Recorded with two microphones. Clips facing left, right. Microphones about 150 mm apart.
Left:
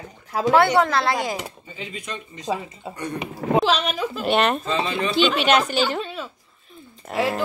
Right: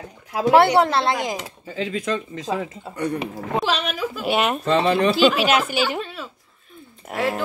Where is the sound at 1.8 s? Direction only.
90° right.